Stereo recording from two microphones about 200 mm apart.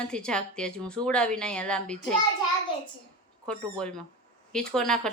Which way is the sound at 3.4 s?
5° left (ahead or behind).